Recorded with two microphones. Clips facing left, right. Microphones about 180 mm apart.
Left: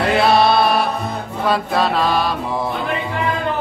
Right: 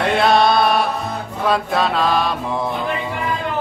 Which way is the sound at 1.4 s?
Centre (ahead or behind).